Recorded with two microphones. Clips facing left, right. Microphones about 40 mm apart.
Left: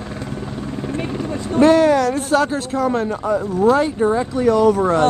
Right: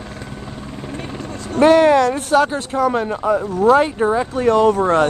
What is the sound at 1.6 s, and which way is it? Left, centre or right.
Speech, right.